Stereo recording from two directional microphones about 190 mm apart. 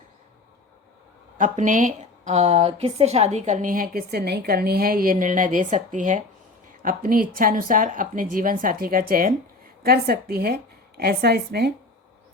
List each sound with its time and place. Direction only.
1.4 s a woman's voice: 40° right (ahead or behind); by 11.7 s 60° right (ahead or behind)